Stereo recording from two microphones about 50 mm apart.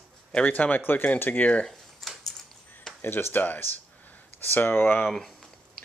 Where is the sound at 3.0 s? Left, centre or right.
Left.